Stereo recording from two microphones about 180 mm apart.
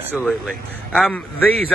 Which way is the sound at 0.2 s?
Centre (ahead or behind).